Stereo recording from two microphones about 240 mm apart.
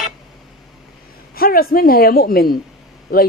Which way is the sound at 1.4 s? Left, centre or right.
Left.